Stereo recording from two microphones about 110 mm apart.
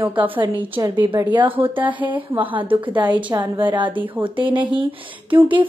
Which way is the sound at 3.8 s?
45° right (ahead or behind).